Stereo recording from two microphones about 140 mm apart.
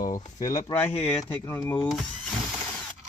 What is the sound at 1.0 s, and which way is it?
Speech, 45° left (ahead or behind).